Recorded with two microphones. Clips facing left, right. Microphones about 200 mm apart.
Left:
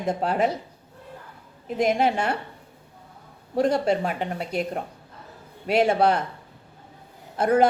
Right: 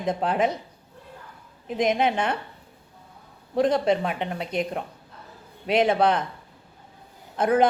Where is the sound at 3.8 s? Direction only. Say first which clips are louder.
Even; centre (ahead or behind).